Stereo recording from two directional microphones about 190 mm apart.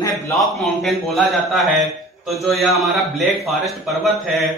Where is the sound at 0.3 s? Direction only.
Centre (ahead or behind).